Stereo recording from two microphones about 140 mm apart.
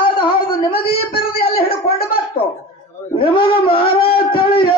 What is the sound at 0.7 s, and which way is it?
Speech, 90° left.